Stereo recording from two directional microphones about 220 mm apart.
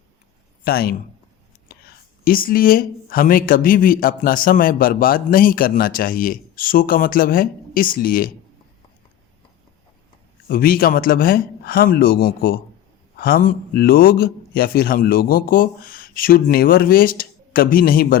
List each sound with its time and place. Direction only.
0.6 s speech: 45° left (ahead or behind)
2.2 s speech: 40° left (ahead or behind)
10.5 s speech: 40° left (ahead or behind)